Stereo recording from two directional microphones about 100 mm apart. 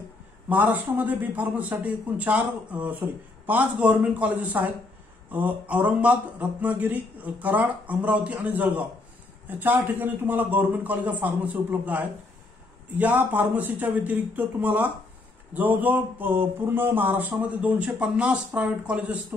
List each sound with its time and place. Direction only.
0.5 s a man's voice: 20° right (ahead or behind)